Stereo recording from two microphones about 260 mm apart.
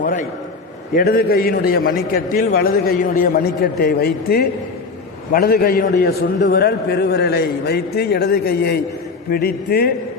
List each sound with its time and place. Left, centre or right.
0.0 s a man's voice: left